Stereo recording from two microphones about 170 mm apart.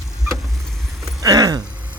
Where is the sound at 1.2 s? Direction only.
20° right (ahead or behind).